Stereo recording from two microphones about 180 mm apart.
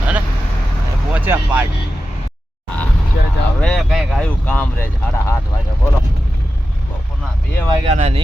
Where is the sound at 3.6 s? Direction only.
Centre (ahead or behind).